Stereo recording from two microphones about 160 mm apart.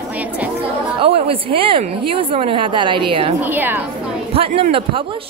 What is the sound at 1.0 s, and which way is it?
A woman's voice, 35° right (ahead or behind).